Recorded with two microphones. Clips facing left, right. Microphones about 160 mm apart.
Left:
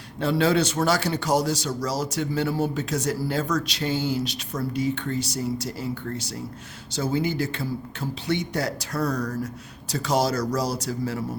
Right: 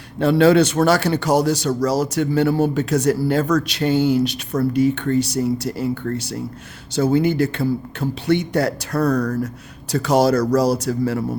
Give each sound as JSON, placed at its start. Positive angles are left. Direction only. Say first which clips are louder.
{"t": 0.2, "sound": "a man's voice", "louder": "right 8 dB", "side_deg": -65}